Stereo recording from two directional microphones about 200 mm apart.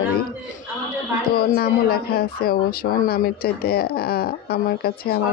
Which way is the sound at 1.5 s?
50° left (ahead or behind).